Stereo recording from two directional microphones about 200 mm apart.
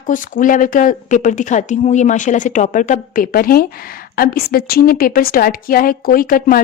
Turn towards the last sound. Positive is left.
turn(degrees=45)  # may be behind; listen again after turning